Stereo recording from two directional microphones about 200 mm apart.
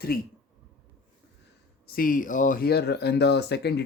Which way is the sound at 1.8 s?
45° left (ahead or behind).